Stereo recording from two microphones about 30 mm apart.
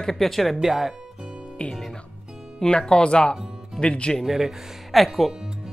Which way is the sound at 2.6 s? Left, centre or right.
Left.